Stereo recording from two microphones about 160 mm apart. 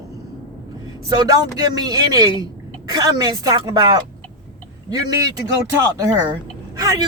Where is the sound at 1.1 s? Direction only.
25° right (ahead or behind).